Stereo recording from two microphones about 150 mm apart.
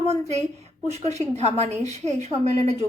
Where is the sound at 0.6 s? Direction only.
45° right (ahead or behind).